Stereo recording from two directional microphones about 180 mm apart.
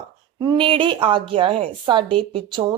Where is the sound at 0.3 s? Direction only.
25° right (ahead or behind).